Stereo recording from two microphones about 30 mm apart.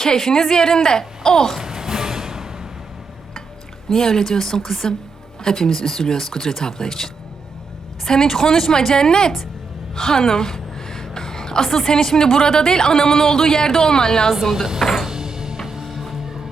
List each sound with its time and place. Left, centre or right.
0.0 s a woman's voice: centre
1.5 s music: centre
3.8 s speech: centre
9.9 s a woman's voice: centre
14.9 s music: centre
15.9 s music: centre